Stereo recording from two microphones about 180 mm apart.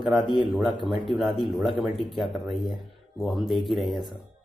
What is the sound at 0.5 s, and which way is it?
Speech, centre (ahead or behind).